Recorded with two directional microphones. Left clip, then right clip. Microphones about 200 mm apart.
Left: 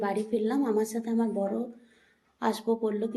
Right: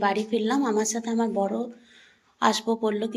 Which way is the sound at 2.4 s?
5° left (ahead or behind).